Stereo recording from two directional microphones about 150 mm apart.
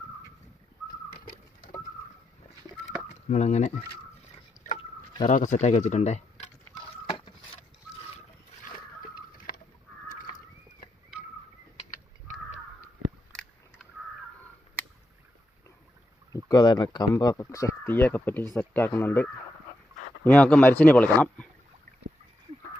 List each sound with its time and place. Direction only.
1.2 s a sound: 70° left (ahead or behind)
3.1 s speech: 50° left (ahead or behind)
4.6 s rowboat: 20° left (ahead or behind)
5.2 s speech: 55° left (ahead or behind)
16.3 s speech: 25° left (ahead or behind); by 21.4 s 10° left (ahead or behind)